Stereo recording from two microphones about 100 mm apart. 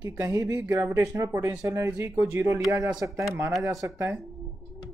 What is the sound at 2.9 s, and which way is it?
Speech, 5° right (ahead or behind).